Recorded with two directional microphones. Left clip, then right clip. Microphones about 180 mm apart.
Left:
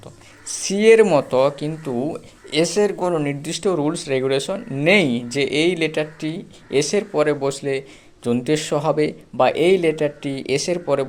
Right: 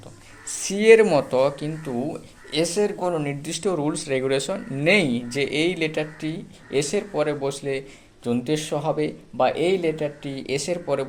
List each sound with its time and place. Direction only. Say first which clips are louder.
0.4 s speech: left 2 dB; 30° left (ahead or behind)